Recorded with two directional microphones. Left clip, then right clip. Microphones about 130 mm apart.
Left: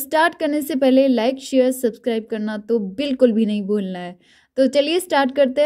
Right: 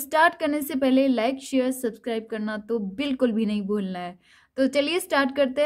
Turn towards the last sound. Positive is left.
turn(degrees=30)  # may be behind; listen again after turning